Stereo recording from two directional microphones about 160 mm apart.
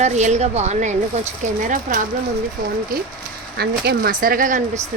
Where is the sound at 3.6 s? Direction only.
80° right; by 4.6 s 55° right (ahead or behind).